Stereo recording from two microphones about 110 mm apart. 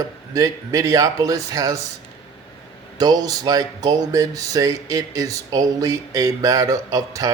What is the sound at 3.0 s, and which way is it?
Speech, 35° right (ahead or behind).